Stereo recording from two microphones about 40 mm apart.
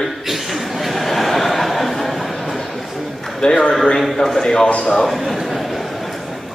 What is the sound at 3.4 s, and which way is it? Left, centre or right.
A man's voice, centre.